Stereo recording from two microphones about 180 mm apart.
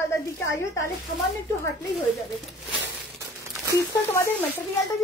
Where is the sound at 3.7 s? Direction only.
15° left (ahead or behind).